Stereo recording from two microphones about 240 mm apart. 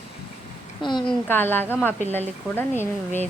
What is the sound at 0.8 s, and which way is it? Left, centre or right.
A woman's voice, centre.